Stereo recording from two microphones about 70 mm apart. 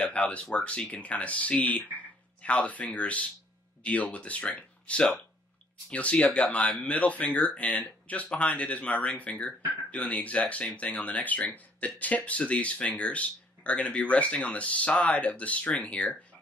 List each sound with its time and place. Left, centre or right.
0.0 s speech: centre